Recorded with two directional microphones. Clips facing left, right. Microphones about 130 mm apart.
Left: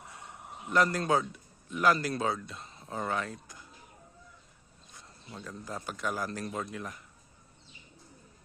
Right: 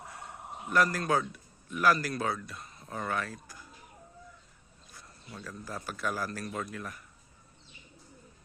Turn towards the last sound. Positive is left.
turn(degrees=20)  # may be behind; listen again after turning